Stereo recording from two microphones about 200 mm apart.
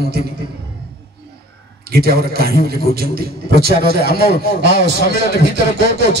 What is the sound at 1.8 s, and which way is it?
A man's voice, 50° right (ahead or behind).